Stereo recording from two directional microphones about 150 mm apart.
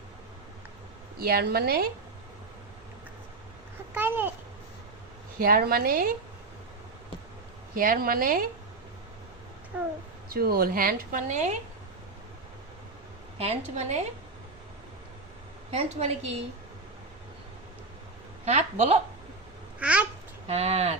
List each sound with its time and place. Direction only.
1.2 s a woman's voice: 90° right
3.9 s a child's voice: 15° right (ahead or behind)
5.4 s a woman's voice: 85° right
7.8 s speech: 70° right (ahead or behind)
9.7 s a child's voice: 10° right (ahead or behind)
10.2 s speech: 85° right; by 11.5 s 55° right (ahead or behind)
13.7 s a woman's voice: 50° right (ahead or behind)
15.7 s a woman's voice: 45° right (ahead or behind)
18.4 s a woman's voice: 45° right (ahead or behind)
19.8 s babbling: 10° right (ahead or behind)
20.5 s a woman's voice: 45° right (ahead or behind)